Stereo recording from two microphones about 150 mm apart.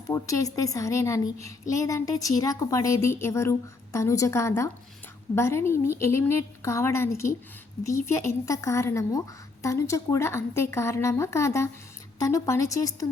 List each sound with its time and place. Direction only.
0.1 s a woman's voice: 20° left (ahead or behind)